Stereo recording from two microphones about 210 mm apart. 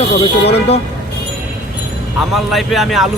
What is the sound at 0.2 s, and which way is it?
Speech, 30° left (ahead or behind).